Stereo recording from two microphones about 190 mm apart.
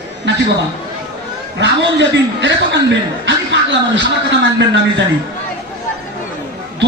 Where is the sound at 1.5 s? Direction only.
70° right (ahead or behind).